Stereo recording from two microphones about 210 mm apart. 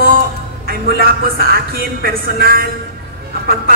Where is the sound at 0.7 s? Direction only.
45° right (ahead or behind).